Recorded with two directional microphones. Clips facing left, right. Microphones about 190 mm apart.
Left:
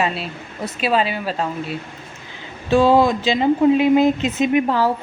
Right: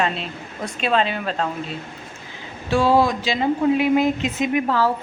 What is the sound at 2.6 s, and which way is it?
Speech, 20° left (ahead or behind).